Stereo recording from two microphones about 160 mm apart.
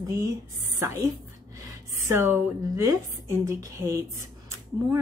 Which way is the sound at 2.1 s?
15° right (ahead or behind).